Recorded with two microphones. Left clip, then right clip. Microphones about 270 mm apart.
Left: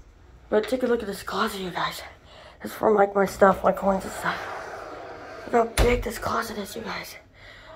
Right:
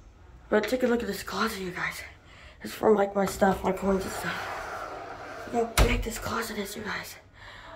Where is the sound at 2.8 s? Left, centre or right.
Centre.